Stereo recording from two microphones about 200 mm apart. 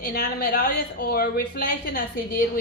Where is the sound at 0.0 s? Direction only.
55° left (ahead or behind).